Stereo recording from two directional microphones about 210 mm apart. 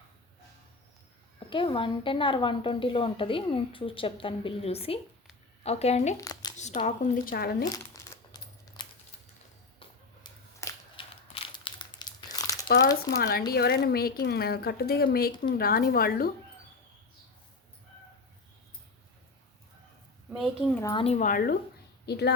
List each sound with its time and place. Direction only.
1.5 s a woman's voice: 25° left (ahead or behind)
6.1 s speech: 15° left (ahead or behind)
6.8 s speech: 35° left (ahead or behind)
7.9 s a sound: 15° left (ahead or behind)
11.5 s crumpling: 20° left (ahead or behind)
13.1 s a woman's voice: 50° left (ahead or behind)
20.3 s a sound: centre (ahead or behind)
20.8 s a woman's voice: 25° left (ahead or behind); by 22.3 s 50° left (ahead or behind)